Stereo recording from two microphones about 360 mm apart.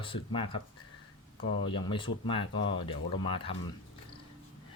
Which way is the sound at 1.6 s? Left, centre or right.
Centre.